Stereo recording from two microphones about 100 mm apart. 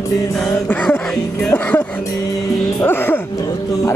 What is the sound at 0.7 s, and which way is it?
Music, 20° left (ahead or behind).